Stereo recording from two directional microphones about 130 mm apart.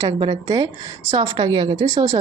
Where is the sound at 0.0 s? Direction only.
35° right (ahead or behind).